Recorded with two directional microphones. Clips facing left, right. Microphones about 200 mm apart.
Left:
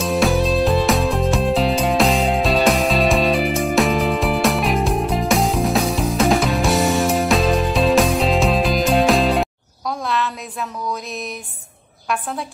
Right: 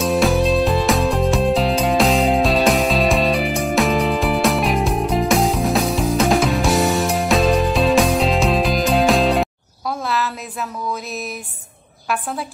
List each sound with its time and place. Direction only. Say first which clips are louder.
0.0 s music: right 1 dB; centre (ahead or behind)
12.1 s a woman's voice: even; 5° right (ahead or behind)